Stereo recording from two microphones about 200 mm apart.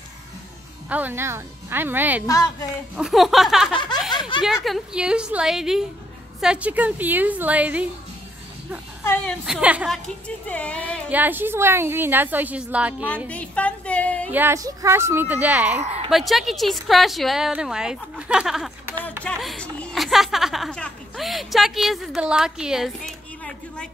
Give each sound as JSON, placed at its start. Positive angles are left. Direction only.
{"t": 0.8, "sound": "a woman's voice", "side_deg": -10}
{"t": 2.2, "sound": "a woman's voice", "side_deg": 15}
{"t": 3.0, "sound": "a woman's voice", "side_deg": 0}
{"t": 3.7, "sound": "snicker", "side_deg": 25}
{"t": 4.6, "sound": "a woman's voice", "side_deg": 0}
{"t": 9.0, "sound": "a woman's voice", "side_deg": 10}
{"t": 9.6, "sound": "a woman's voice", "side_deg": -5}
{"t": 11.1, "sound": "a woman's voice", "side_deg": -10}
{"t": 13.3, "sound": "a sound", "side_deg": 5}
{"t": 14.3, "sound": "a woman's voice", "side_deg": -10}